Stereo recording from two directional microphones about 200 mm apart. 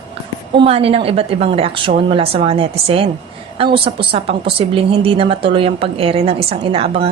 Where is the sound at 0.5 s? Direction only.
30° right (ahead or behind).